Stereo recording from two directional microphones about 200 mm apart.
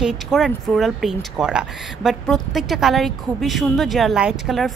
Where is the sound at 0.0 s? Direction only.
Centre (ahead or behind).